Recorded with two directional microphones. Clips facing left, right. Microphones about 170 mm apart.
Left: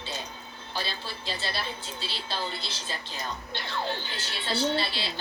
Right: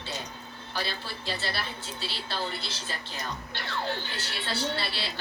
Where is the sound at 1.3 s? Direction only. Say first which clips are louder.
Right 1 dB; 15° left (ahead or behind).